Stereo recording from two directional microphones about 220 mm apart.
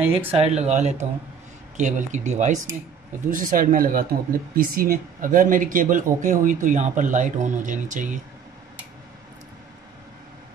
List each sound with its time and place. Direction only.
0.3 s speech: 30° right (ahead or behind)